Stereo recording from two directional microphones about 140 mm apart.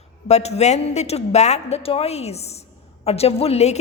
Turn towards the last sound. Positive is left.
turn(degrees=50)  # may be behind; listen again after turning